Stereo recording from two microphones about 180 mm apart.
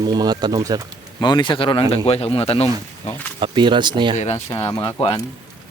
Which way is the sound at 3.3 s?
25° right (ahead or behind).